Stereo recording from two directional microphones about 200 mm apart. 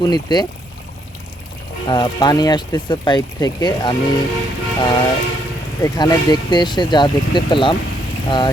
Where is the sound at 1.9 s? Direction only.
20° left (ahead or behind).